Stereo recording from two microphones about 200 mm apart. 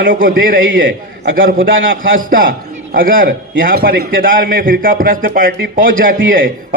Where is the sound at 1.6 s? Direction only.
75° right (ahead or behind).